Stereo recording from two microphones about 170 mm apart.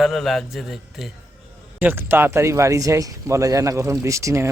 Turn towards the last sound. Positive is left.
turn(degrees=-20)  # may be behind; listen again after turning